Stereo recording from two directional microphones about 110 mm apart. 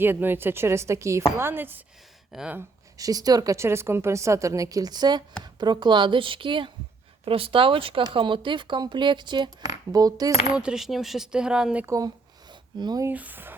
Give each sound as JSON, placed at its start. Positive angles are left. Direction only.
{"t": 0.0, "sound": "a woman's voice", "side_deg": -20}
{"t": 2.3, "sound": "speech", "side_deg": -5}
{"t": 3.0, "sound": "a woman's voice", "side_deg": -35}
{"t": 9.6, "sound": "a woman's voice", "side_deg": -35}
{"t": 10.6, "sound": "speech", "side_deg": -5}
{"t": 11.9, "sound": "a sound", "side_deg": -35}
{"t": 13.1, "sound": "speech", "side_deg": -15}